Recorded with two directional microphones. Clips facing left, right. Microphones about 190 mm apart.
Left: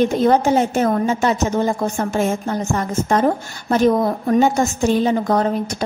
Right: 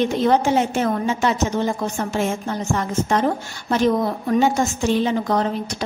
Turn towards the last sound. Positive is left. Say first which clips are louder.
# left 3 dB
turn(degrees=45)  # may be behind; listen again after turning